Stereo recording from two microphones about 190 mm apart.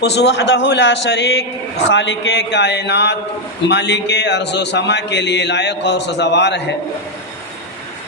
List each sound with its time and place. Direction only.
0.0 s a man's voice: 60° left (ahead or behind)